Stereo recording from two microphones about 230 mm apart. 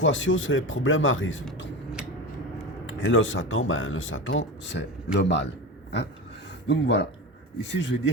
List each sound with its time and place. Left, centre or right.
0.0 s speech: left
2.8 s speech: left
6.7 s speech: left